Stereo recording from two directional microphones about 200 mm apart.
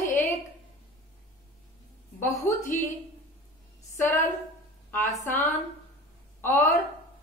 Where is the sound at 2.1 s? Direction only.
15° left (ahead or behind).